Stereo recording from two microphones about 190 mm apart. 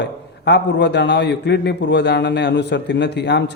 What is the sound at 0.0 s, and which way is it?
Speech, 65° left (ahead or behind).